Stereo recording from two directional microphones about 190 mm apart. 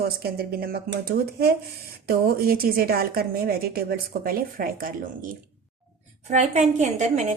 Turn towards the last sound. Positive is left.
turn(degrees=-40)  # may be behind; listen again after turning